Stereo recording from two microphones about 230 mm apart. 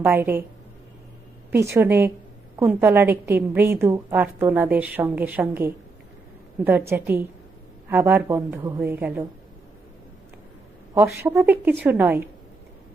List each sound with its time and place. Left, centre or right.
0.0 s a woman's voice: centre
1.7 s a woman's voice: centre
11.2 s a woman's voice: centre